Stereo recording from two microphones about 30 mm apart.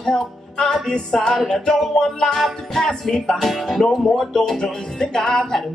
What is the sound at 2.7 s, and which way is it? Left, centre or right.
Music, centre.